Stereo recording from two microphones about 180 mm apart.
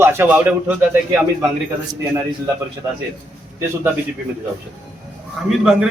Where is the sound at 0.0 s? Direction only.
10° right (ahead or behind).